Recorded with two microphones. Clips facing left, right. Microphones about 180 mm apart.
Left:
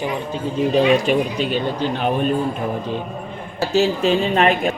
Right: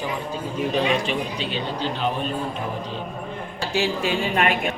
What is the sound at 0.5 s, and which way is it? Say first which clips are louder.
Speech: left 7 dB; 35° left (ahead or behind).